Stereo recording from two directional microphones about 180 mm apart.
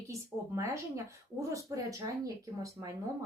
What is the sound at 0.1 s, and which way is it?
Speech, 15° right (ahead or behind).